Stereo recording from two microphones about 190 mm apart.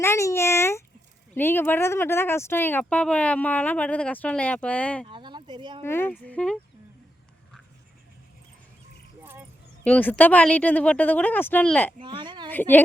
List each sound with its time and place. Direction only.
0.0 s a sound: 15° left (ahead or behind)
1.4 s speech: 10° left (ahead or behind)
5.0 s speech: 25° right (ahead or behind)
5.8 s speech: 10° left (ahead or behind)
9.8 s speech: 10° left (ahead or behind)
11.9 s a woman's voice: 25° right (ahead or behind)
12.5 s speech: 10° left (ahead or behind)